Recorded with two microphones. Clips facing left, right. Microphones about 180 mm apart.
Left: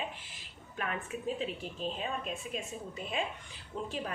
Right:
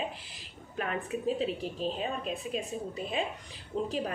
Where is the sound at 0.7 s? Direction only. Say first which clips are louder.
Right 4 dB; 35° right (ahead or behind).